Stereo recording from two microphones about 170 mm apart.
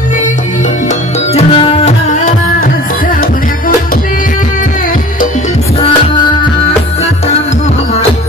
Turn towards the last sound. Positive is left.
turn(degrees=25)  # may be behind; listen again after turning